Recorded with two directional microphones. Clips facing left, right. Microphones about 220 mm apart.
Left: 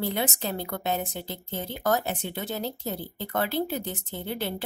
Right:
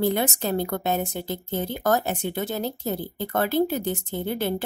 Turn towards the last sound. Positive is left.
turn(degrees=-50)  # may be behind; listen again after turning